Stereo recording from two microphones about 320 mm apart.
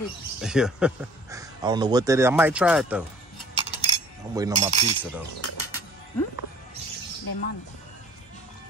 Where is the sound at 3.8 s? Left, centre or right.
Centre.